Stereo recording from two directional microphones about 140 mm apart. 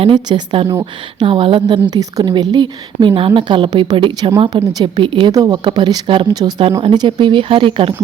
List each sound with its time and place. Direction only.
0.0 s a woman's voice: 35° right (ahead or behind)